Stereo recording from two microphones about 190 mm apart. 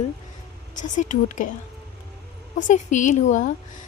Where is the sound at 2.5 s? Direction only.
40° left (ahead or behind).